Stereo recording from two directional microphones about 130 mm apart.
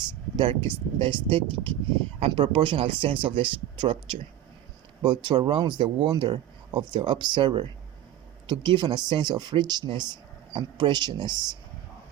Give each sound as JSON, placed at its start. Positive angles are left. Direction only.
{"t": 0.3, "sound": "speech", "side_deg": -45}